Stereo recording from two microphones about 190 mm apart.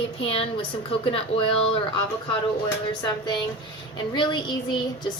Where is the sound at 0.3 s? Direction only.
30° left (ahead or behind).